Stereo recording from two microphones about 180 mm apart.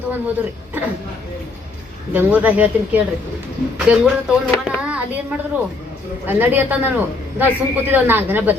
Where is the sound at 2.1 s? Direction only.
10° right (ahead or behind).